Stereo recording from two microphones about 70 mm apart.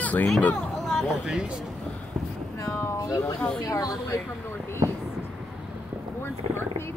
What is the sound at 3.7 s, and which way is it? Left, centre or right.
Speech, left.